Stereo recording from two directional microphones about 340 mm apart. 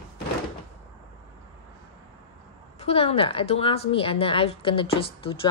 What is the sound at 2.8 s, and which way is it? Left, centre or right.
A woman's voice, centre.